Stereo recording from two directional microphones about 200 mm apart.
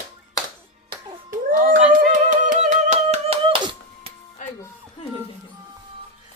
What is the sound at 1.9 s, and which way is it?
Hands, 40° right (ahead or behind).